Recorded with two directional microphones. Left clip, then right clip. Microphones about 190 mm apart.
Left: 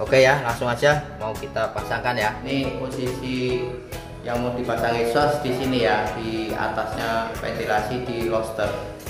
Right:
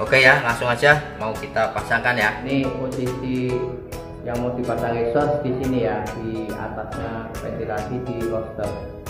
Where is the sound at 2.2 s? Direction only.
Centre (ahead or behind).